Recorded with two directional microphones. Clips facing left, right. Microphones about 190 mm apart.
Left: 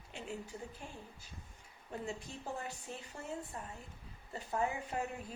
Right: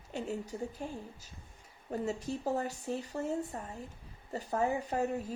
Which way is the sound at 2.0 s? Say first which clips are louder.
Right 9 dB; 40° right (ahead or behind).